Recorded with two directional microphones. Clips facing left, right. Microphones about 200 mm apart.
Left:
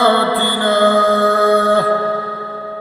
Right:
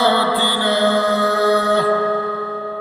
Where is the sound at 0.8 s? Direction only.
50° left (ahead or behind).